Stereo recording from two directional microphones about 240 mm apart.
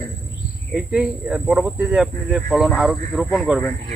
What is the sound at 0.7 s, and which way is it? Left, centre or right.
Speech, centre.